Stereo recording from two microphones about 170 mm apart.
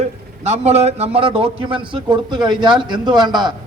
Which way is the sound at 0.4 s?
40° right (ahead or behind).